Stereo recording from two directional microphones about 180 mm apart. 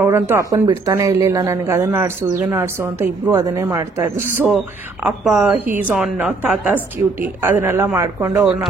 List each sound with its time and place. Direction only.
0.0 s speech: 15° right (ahead or behind)
4.4 s speech: 5° right (ahead or behind)